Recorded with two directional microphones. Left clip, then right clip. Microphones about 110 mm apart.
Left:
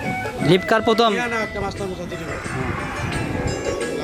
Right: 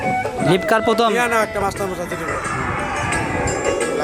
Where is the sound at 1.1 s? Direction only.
25° right (ahead or behind).